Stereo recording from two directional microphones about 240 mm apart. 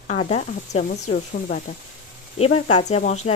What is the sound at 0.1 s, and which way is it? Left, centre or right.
Speech, left.